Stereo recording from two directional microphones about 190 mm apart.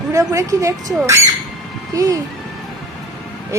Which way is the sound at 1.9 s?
20° right (ahead or behind).